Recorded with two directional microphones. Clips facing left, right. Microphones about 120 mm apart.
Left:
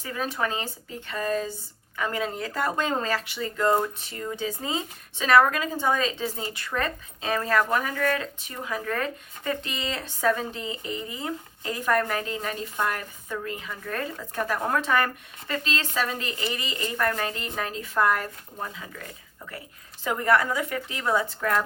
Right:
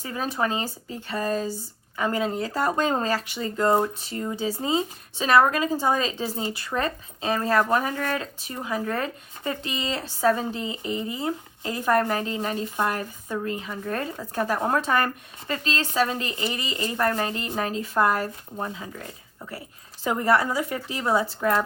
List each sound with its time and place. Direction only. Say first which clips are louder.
0.0 s speech: right 2 dB; 35° right (ahead or behind)
20.1 s speech: right 1 dB; 30° right (ahead or behind)